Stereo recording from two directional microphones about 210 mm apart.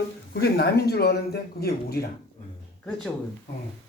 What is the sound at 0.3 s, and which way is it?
Speech, 50° left (ahead or behind).